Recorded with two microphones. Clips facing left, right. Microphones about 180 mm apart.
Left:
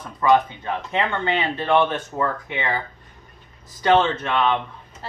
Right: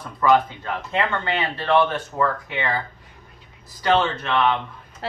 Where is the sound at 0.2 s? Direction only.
20° left (ahead or behind).